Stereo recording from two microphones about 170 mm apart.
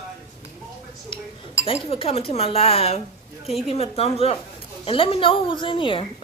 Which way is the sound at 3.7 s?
35° left (ahead or behind).